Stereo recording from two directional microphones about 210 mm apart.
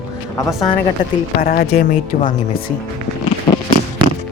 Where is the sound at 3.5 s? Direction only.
20° left (ahead or behind).